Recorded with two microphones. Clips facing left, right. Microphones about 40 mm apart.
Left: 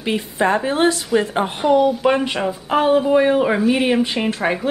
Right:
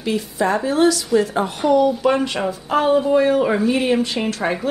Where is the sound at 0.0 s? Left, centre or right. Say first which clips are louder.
Left 1 dB; left.